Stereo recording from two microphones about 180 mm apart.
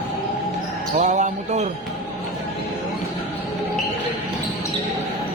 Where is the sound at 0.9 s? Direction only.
40° right (ahead or behind).